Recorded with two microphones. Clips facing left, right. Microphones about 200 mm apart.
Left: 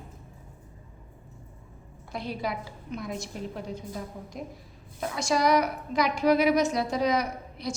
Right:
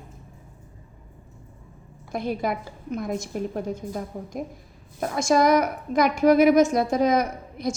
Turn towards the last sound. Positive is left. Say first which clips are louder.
# right 5 dB
turn(degrees=-45)  # may be behind; listen again after turning